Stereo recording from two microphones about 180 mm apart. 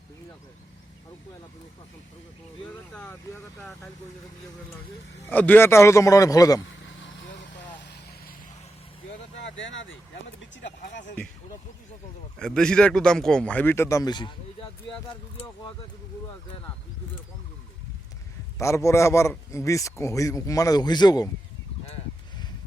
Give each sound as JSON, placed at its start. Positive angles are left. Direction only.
{"t": 2.9, "sound": "speech", "side_deg": 5}
{"t": 5.2, "sound": "a man's voice", "side_deg": 10}
{"t": 6.8, "sound": "vehicle", "side_deg": 90}
{"t": 9.4, "sound": "speech", "side_deg": 90}
{"t": 10.6, "sound": "speech", "side_deg": 80}
{"t": 12.4, "sound": "a man's voice", "side_deg": 5}
{"t": 18.6, "sound": "a man's voice", "side_deg": 15}